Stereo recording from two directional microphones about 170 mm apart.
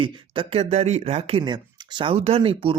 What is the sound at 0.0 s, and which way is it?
Speech, 35° right (ahead or behind).